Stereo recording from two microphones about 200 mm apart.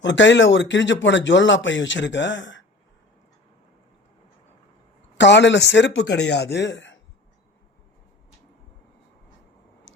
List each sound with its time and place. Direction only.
0.0 s speech: 65° left (ahead or behind)
5.1 s speech: 60° left (ahead or behind)